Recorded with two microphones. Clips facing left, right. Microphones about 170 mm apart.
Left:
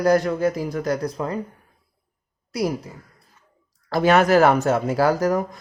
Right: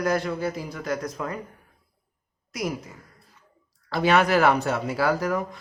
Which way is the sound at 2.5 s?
35° left (ahead or behind).